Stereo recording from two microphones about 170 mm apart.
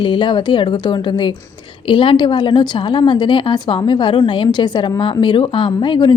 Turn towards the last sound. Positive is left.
turn(degrees=30)  # may be behind; listen again after turning